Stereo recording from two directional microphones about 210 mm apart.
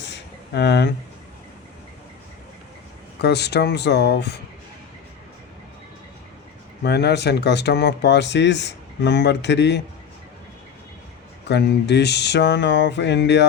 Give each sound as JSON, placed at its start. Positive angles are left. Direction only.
{"t": 0.0, "sound": "a sound", "side_deg": 55}
{"t": 3.2, "sound": "speech", "side_deg": 55}
{"t": 6.8, "sound": "speech", "side_deg": 50}
{"t": 11.4, "sound": "speech", "side_deg": 50}